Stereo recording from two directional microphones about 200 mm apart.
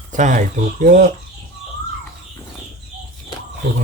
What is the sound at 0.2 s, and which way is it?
Speech, 40° right (ahead or behind).